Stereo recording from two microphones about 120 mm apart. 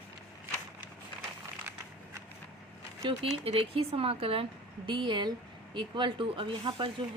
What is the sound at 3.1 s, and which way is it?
Speech, 50° right (ahead or behind).